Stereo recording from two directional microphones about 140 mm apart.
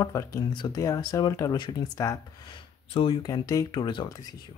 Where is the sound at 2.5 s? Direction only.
40° left (ahead or behind).